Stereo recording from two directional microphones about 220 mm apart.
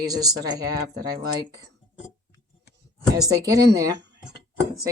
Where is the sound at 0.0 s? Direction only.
15° right (ahead or behind).